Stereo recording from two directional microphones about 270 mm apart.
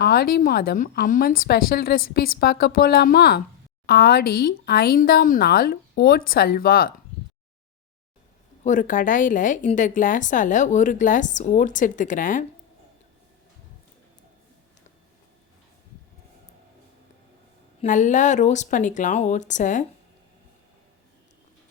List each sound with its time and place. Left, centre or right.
0.0 s a woman's voice: left
8.6 s a woman's voice: left
17.8 s a woman's voice: left